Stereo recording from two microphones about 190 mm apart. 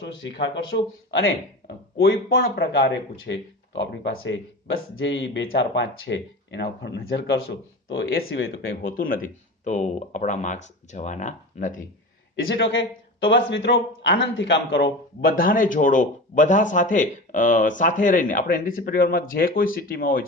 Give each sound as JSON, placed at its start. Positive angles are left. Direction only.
{"t": 0.2, "sound": "speech", "side_deg": 70}
{"t": 1.6, "sound": "a sound", "side_deg": 55}
{"t": 2.4, "sound": "speech", "side_deg": 60}
{"t": 7.9, "sound": "speech", "side_deg": 85}
{"t": 8.1, "sound": "speech", "side_deg": 55}
{"t": 12.5, "sound": "speech", "side_deg": 75}
{"t": 15.4, "sound": "speech", "side_deg": 45}